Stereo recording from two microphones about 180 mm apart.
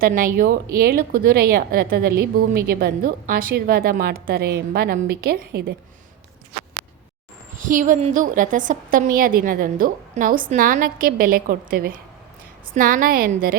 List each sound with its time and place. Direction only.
0.0 s a woman's voice: 50° right (ahead or behind)
7.5 s a woman's voice: 45° right (ahead or behind)